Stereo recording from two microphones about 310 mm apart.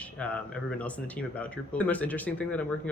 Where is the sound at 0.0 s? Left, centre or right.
Centre.